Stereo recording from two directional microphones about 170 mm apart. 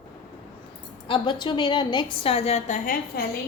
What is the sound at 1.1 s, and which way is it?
A woman's voice, 30° left (ahead or behind).